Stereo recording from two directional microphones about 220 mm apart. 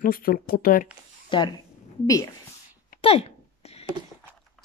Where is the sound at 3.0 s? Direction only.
25° left (ahead or behind).